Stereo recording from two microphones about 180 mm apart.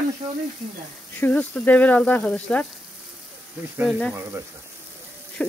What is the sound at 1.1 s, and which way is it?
Speech, 10° left (ahead or behind).